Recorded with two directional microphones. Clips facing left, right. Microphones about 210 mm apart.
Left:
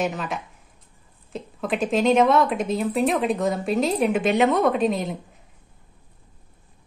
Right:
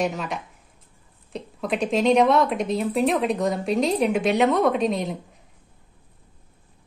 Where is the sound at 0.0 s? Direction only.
Centre (ahead or behind).